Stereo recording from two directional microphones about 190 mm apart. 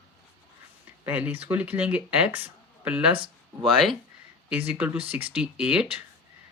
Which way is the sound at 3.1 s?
25° right (ahead or behind).